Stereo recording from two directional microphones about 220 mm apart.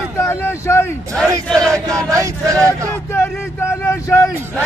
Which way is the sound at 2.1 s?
15° right (ahead or behind).